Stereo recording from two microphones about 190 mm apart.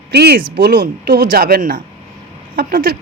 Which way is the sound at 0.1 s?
60° right (ahead or behind).